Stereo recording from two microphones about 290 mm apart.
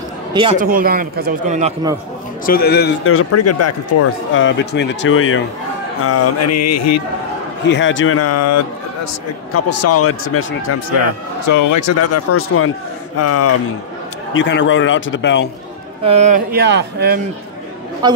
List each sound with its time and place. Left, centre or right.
0.6 s speech: right
2.4 s a man's voice: left
6.0 s speech: left
7.6 s a man's voice: left
11.4 s a man's voice: left
14.3 s a man's voice: left
16.0 s speech: right
18.0 s a man's voice: centre